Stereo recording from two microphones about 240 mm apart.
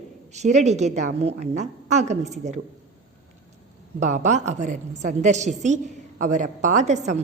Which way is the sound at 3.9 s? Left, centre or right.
Right.